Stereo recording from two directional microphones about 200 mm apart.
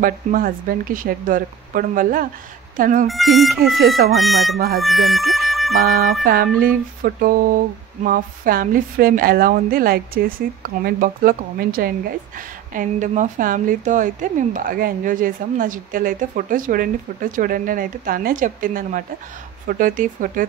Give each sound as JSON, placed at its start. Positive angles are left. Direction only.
{"t": 0.0, "sound": "speech", "side_deg": -45}
{"t": 3.1, "sound": "speech", "side_deg": 0}
{"t": 5.8, "sound": "speech", "side_deg": -50}